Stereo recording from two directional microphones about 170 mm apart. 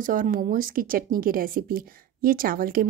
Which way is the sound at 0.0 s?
50° right (ahead or behind).